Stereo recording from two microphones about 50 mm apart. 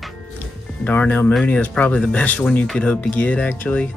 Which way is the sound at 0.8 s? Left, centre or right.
Left.